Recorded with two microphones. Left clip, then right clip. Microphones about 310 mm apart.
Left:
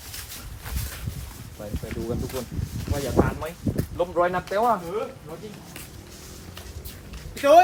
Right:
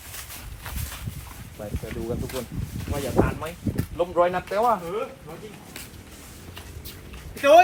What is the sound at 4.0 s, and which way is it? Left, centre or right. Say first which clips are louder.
Speech: right 1 dB; right.